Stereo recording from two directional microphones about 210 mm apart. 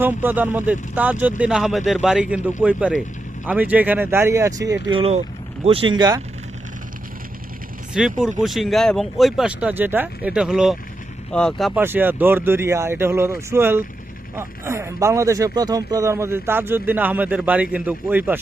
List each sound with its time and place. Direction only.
0.0 s speech: 10° right (ahead or behind)
7.9 s speech: centre (ahead or behind)